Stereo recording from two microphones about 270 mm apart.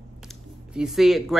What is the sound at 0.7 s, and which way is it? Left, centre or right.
Speech, centre.